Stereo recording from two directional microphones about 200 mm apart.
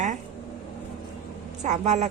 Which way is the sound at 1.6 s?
35° right (ahead or behind).